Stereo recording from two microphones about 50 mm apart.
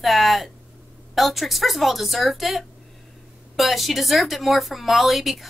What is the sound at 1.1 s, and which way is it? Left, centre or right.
Speech, centre.